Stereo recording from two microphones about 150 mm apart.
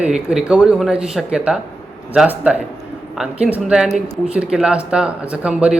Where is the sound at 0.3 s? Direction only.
5° right (ahead or behind).